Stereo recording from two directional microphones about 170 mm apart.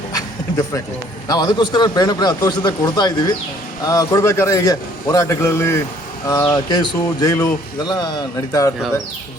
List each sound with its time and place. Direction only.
1.3 s a man's voice: 25° left (ahead or behind)